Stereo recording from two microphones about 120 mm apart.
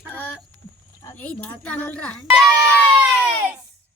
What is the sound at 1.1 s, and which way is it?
Speech, 10° left (ahead or behind).